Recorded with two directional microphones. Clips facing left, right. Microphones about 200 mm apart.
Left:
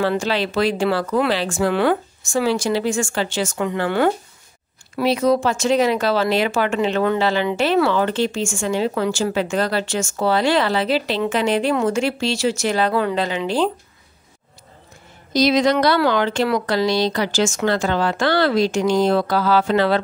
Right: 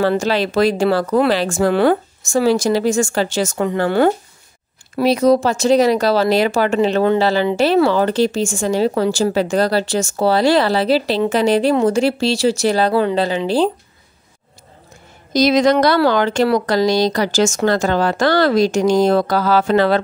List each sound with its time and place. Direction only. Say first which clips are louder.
0.0 s speech: right 4 dB; 40° right (ahead or behind)
15.3 s speech: right 3 dB; 45° right (ahead or behind)